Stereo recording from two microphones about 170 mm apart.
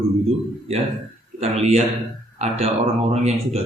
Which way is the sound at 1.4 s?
40° right (ahead or behind).